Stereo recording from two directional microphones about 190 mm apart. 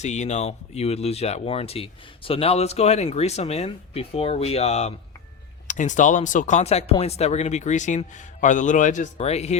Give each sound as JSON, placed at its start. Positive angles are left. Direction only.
{"t": 0.0, "sound": "speech", "side_deg": 40}